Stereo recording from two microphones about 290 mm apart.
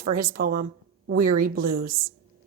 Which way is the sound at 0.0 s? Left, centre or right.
Right.